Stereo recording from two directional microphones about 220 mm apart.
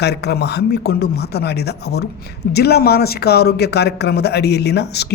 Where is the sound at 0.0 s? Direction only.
50° left (ahead or behind).